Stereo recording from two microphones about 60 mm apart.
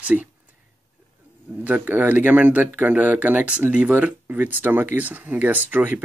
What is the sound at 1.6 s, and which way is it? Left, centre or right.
Speech, right.